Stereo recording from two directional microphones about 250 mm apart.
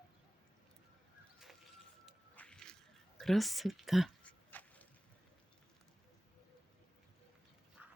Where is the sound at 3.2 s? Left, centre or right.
Centre.